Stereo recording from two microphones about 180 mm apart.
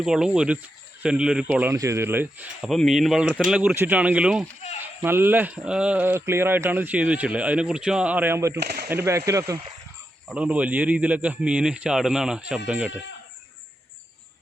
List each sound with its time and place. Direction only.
0.0 s speech: 5° right (ahead or behind)
8.5 s speech: 60° right (ahead or behind)
8.9 s speech: 15° right (ahead or behind)